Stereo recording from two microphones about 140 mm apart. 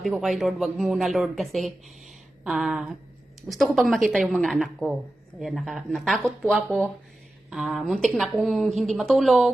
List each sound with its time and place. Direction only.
0.0 s speech: centre (ahead or behind)